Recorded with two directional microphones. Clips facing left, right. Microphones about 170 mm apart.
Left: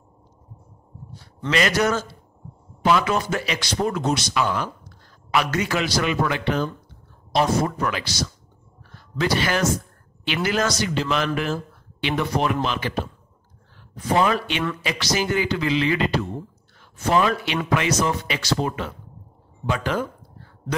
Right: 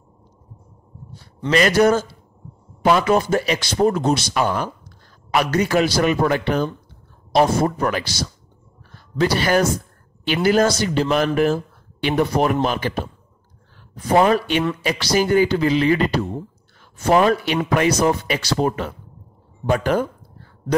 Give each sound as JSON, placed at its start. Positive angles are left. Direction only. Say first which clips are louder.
{"t": 1.5, "sound": "a man's voice", "louder": "right 6 dB", "side_deg": -40}
{"t": 4.4, "sound": "a man's voice", "louder": "right 3 dB", "side_deg": -45}
{"t": 11.1, "sound": "speech", "louder": "right 9 dB", "side_deg": -45}
{"t": 14.1, "sound": "a man's voice", "louder": "right 5 dB", "side_deg": -40}